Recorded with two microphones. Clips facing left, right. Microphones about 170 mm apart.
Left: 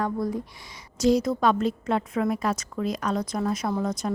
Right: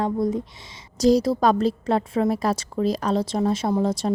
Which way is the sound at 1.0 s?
35° right (ahead or behind).